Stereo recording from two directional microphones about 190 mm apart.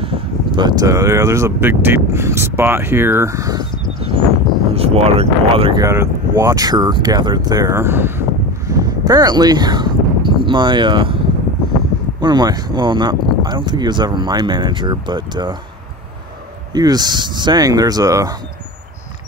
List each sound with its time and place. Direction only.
0.0 s speech: 25° right (ahead or behind)
4.7 s speech: 30° right (ahead or behind)
5.9 s speech: 15° right (ahead or behind)
12.2 s speech: 20° right (ahead or behind)
16.7 s speech: 20° right (ahead or behind)